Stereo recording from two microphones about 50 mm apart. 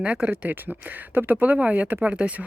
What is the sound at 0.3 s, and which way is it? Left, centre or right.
Speech, right.